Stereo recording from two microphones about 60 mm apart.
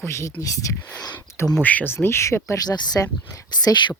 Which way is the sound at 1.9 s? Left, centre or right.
Left.